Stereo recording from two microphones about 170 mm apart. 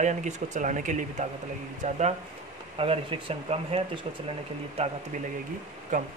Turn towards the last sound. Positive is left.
turn(degrees=-45)  # may be behind; listen again after turning